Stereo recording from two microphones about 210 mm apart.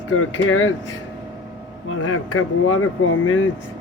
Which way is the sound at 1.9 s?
75° left (ahead or behind).